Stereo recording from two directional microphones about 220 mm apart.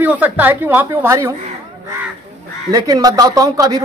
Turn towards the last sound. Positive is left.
turn(degrees=-15)  # may be behind; listen again after turning